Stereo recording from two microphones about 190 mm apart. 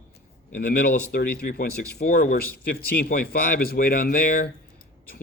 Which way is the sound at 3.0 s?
55° left (ahead or behind).